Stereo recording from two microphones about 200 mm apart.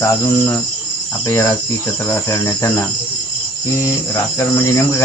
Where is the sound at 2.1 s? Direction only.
15° left (ahead or behind).